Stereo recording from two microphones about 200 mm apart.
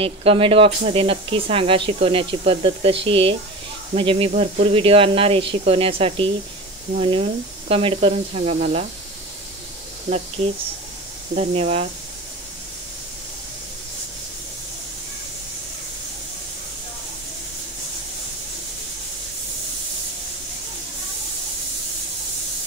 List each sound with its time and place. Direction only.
0.0 s speech: 30° right (ahead or behind)
10.0 s speech: 35° right (ahead or behind)